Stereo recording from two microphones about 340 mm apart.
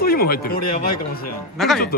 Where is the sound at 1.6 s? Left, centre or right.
Centre.